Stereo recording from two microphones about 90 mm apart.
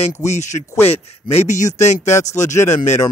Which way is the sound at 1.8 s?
35° left (ahead or behind).